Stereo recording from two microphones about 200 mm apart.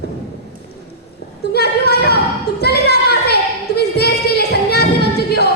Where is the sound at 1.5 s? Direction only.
55° left (ahead or behind).